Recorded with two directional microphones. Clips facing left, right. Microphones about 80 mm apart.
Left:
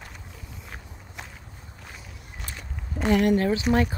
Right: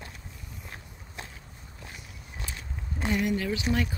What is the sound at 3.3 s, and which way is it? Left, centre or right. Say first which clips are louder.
Speech: left 6 dB; left.